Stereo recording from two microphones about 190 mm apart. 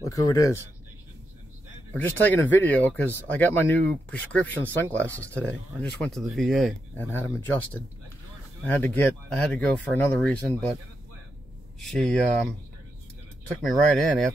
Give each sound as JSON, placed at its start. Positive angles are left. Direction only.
{"t": 0.0, "sound": "speech", "side_deg": 20}
{"t": 2.0, "sound": "speech", "side_deg": 10}
{"t": 11.8, "sound": "speech", "side_deg": 0}
{"t": 13.7, "sound": "speech", "side_deg": 0}